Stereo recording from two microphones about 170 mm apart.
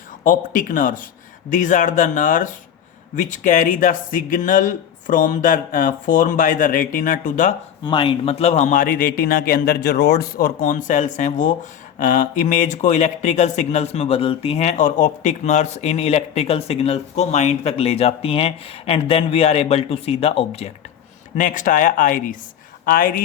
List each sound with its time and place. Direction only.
0.3 s speech: 50° left (ahead or behind)
7.9 s speech: 30° left (ahead or behind)
21.3 s speech: 50° left (ahead or behind)